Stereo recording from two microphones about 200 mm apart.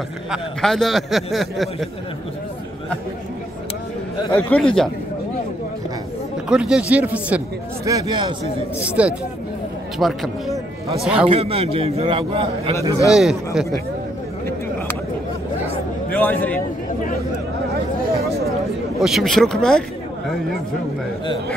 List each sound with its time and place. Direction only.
0.3 s a man's voice: centre (ahead or behind)
4.4 s a man's voice: 5° left (ahead or behind)
6.5 s speech: 5° right (ahead or behind)
7.8 s a man's voice: 20° right (ahead or behind)
8.7 s a man's voice: 5° right (ahead or behind)
11.2 s a man's voice: 30° right (ahead or behind)
13.1 s a man's voice: 5° right (ahead or behind)
16.1 s a man's voice: 10° left (ahead or behind)
18.9 s a man's voice: centre (ahead or behind)